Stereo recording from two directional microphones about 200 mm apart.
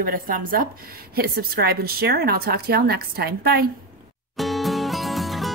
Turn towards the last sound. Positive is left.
turn(degrees=0)  # may be behind; listen again after turning